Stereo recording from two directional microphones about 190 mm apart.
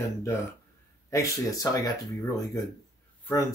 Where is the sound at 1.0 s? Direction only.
15° left (ahead or behind).